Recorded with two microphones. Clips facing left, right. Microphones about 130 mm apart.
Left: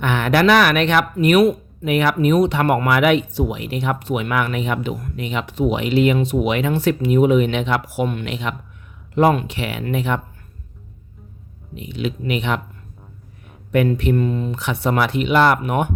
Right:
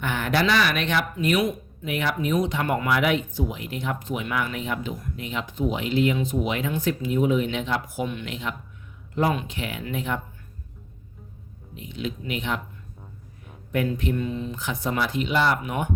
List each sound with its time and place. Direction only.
0.0 s speech: 70° left (ahead or behind)
11.7 s speech: 75° left (ahead or behind)
13.7 s speech: 70° left (ahead or behind)